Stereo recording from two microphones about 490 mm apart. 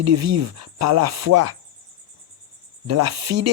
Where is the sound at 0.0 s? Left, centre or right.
Right.